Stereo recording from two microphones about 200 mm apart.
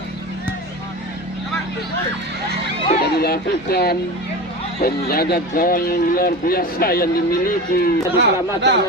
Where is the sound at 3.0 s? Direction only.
50° left (ahead or behind).